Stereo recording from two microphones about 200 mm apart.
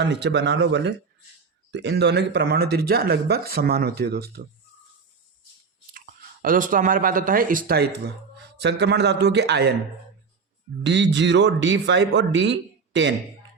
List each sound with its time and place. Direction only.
0.0 s speech: 60° right (ahead or behind)
6.4 s speech: 45° right (ahead or behind)
8.5 s speech: 55° right (ahead or behind)
10.8 s speech: 60° right (ahead or behind)